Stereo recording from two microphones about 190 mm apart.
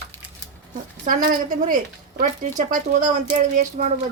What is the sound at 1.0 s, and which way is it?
A woman's voice, 45° right (ahead or behind).